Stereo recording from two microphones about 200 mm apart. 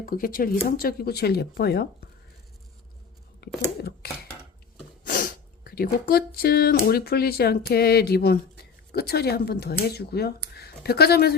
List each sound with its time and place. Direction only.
0.0 s speech: 45° left (ahead or behind)
3.4 s a sound: 55° left (ahead or behind)
5.0 s speech: 45° left (ahead or behind)